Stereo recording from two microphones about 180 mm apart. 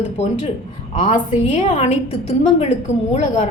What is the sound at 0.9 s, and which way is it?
A woman's voice, 35° left (ahead or behind).